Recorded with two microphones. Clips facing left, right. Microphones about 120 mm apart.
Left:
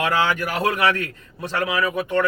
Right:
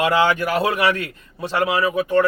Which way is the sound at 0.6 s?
15° right (ahead or behind).